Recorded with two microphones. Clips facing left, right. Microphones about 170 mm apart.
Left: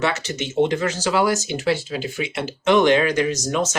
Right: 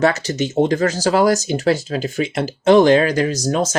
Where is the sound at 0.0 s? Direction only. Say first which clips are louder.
Right 6 dB; 40° right (ahead or behind).